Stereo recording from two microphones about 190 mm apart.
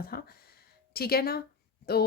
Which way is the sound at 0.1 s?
55° left (ahead or behind).